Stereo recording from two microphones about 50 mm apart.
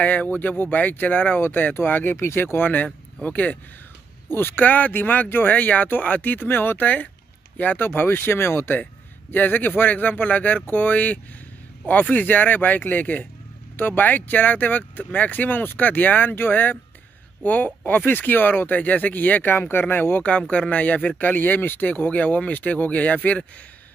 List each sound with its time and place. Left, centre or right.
0.0 s speech: left
1.4 s speech: left
2.1 s speech: left
4.3 s speech: left
4.6 s speech: left
9.3 s speech: left